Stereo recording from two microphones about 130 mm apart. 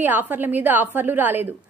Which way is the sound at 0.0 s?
15° right (ahead or behind).